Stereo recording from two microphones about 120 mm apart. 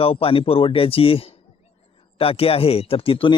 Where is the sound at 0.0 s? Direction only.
50° left (ahead or behind).